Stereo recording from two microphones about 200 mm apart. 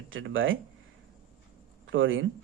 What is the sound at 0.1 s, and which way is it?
Speech, 75° right (ahead or behind).